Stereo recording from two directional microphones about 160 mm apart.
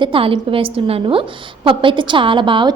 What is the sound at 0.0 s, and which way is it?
A woman's voice, 35° right (ahead or behind).